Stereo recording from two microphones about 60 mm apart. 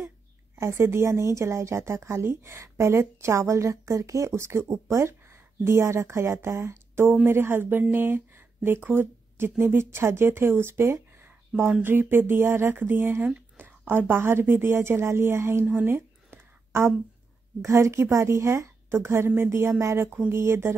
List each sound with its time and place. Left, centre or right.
0.6 s a woman's voice: right
11.2 s a sound: right
11.8 s a woman's voice: right
15.6 s speech: right
15.9 s a sound: right
17.6 s a woman's voice: right